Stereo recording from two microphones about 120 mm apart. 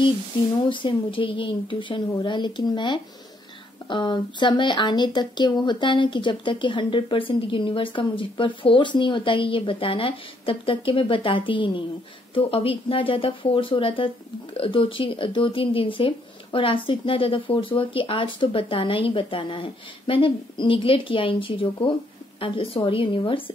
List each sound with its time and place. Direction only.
0.6 s speech: 40° left (ahead or behind)